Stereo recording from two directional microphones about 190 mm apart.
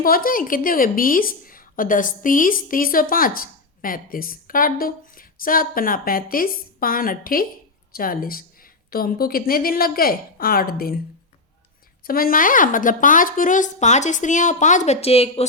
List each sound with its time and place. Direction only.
0.0 s a woman's voice: 50° left (ahead or behind)
12.0 s a woman's voice: 50° left (ahead or behind); by 15.4 s 30° left (ahead or behind)